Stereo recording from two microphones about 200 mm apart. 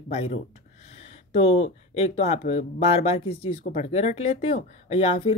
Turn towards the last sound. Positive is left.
turn(degrees=30)  # may be behind; listen again after turning